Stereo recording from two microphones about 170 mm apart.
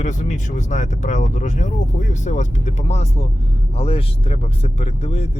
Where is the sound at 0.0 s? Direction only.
45° left (ahead or behind).